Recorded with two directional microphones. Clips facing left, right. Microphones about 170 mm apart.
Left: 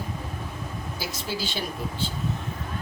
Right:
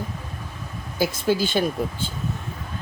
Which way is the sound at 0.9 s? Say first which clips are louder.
Right 12 dB; 50° right (ahead or behind).